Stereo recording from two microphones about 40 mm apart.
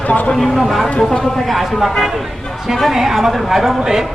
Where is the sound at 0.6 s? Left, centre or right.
Centre.